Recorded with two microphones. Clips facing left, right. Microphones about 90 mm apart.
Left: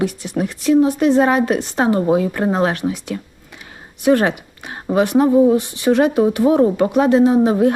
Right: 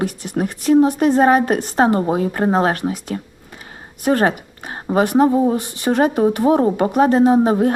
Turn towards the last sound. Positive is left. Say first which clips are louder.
# even
turn(degrees=-45)  # may be behind; listen again after turning